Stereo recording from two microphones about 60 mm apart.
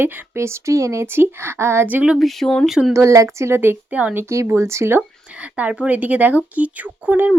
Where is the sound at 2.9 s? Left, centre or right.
Right.